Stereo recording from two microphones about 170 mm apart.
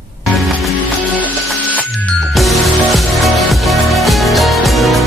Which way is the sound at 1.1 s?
10° left (ahead or behind).